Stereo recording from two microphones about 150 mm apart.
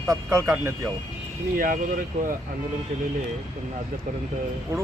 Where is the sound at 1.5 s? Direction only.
65° right (ahead or behind).